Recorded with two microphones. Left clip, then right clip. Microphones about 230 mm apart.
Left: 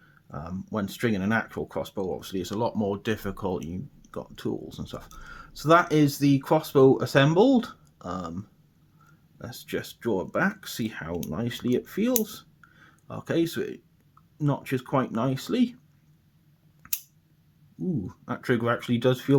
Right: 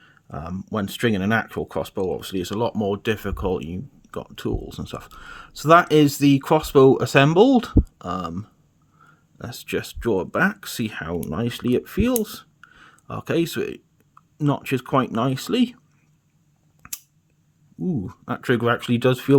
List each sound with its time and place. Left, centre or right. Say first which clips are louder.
0.0 s speech: right 5 dB; right
16.8 s a sound: even; right
17.8 s speech: right 4 dB; right